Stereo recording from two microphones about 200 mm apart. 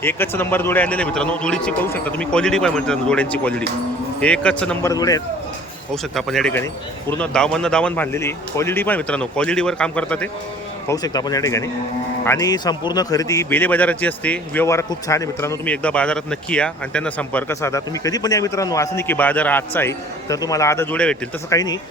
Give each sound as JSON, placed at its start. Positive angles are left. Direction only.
{"t": 0.0, "sound": "a man's voice", "side_deg": 10}
{"t": 4.9, "sound": "a man's voice", "side_deg": 15}
{"t": 5.9, "sound": "a man's voice", "side_deg": 0}
{"t": 10.8, "sound": "a man's voice", "side_deg": 20}
{"t": 21.5, "sound": "speech", "side_deg": 20}